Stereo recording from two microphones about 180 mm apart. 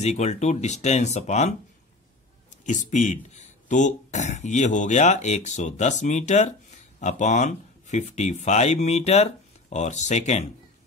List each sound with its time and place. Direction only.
0.0 s speech: 40° left (ahead or behind)
2.6 s speech: 45° left (ahead or behind)